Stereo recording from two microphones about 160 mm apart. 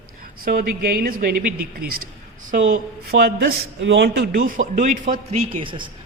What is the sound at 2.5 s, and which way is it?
Speech, 65° right (ahead or behind).